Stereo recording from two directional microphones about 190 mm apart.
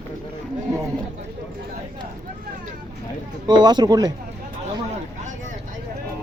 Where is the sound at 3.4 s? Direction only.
20° right (ahead or behind).